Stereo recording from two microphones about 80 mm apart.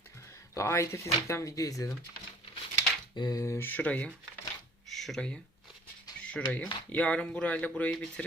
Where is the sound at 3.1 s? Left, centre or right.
Left.